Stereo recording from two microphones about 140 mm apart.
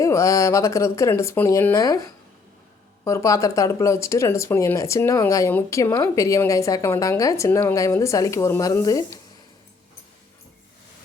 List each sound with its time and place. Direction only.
0.0 s speech: 20° left (ahead or behind)